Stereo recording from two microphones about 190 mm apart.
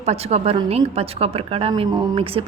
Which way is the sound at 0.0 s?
35° right (ahead or behind).